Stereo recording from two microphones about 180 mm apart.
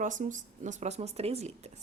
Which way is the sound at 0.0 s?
45° right (ahead or behind).